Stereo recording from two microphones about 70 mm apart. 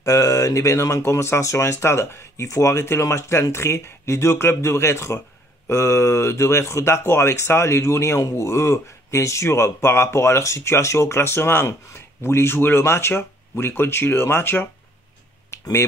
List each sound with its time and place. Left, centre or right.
0.0 s speech: left